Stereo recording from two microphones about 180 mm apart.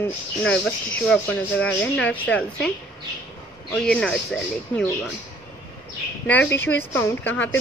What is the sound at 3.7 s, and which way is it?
Speech, 5° left (ahead or behind).